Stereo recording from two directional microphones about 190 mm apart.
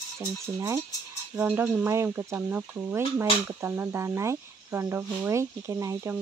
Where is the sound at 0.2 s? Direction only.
15° right (ahead or behind).